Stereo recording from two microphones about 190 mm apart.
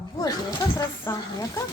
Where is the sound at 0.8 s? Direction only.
15° left (ahead or behind).